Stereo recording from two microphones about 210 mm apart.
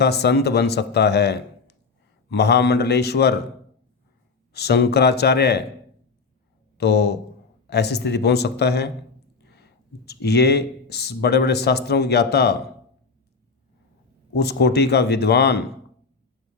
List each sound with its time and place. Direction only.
0.0 s speech: 50° left (ahead or behind)
4.5 s speech: 50° left (ahead or behind)
6.7 s speech: 50° left (ahead or behind)
9.4 s a sound: 50° left (ahead or behind)
10.1 s speech: 50° left (ahead or behind)
14.3 s speech: 50° left (ahead or behind)